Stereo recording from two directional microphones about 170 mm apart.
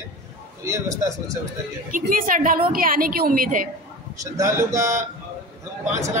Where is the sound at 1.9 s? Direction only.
50° right (ahead or behind).